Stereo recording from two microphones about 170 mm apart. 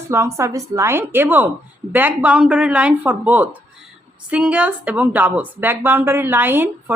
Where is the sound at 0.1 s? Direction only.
15° right (ahead or behind).